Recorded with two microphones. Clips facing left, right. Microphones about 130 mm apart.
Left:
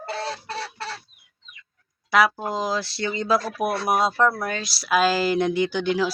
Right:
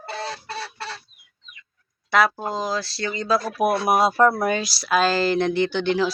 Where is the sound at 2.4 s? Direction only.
15° left (ahead or behind).